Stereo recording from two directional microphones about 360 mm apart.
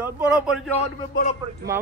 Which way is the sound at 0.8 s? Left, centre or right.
Centre.